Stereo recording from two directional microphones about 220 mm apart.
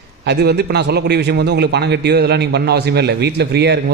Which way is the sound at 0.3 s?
50° right (ahead or behind).